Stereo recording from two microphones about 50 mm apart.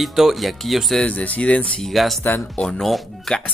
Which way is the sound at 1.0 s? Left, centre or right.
Left.